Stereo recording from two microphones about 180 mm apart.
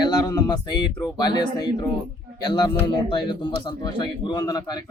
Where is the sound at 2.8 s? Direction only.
25° left (ahead or behind).